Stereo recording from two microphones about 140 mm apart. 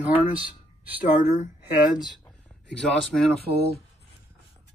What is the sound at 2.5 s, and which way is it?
Speech, 5° left (ahead or behind).